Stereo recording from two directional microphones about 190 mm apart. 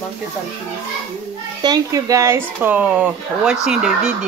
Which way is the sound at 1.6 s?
20° right (ahead or behind).